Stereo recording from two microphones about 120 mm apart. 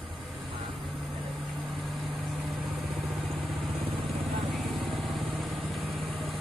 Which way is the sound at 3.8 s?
45° right (ahead or behind).